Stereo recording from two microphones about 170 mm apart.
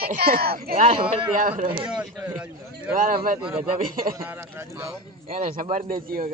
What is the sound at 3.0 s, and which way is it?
A man's voice, 55° right (ahead or behind).